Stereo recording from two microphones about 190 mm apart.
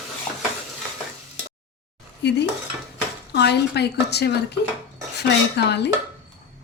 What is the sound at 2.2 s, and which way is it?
A woman's voice, 65° left (ahead or behind).